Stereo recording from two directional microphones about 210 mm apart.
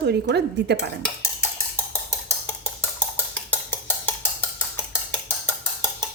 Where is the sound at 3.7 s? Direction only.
10° left (ahead or behind).